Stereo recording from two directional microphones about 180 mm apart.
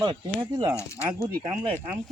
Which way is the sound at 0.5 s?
20° right (ahead or behind).